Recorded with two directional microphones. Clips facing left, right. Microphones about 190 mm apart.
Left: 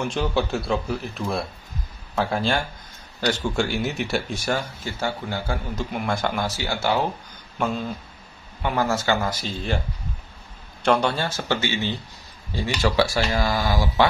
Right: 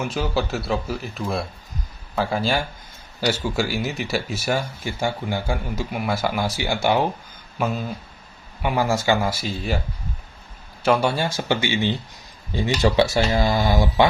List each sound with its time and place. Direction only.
0.0 s speech: centre (ahead or behind)
7.5 s speech: 5° right (ahead or behind)
10.8 s speech: 5° right (ahead or behind); by 14.0 s 20° right (ahead or behind)